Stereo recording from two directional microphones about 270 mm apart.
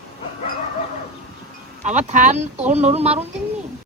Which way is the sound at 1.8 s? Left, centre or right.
Right.